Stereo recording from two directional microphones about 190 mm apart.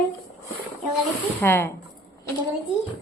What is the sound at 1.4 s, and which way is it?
Speech, 15° left (ahead or behind).